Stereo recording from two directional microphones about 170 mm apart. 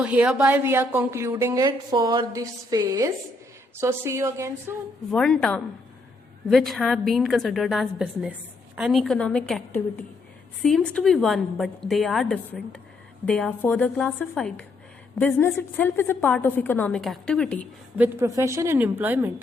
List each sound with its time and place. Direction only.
0.0 s a woman's voice: 10° right (ahead or behind)
5.1 s a woman's voice: 5° left (ahead or behind)
17.9 s a woman's voice: 10° right (ahead or behind)